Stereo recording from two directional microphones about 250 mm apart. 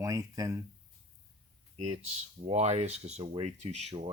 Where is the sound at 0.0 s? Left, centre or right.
Centre.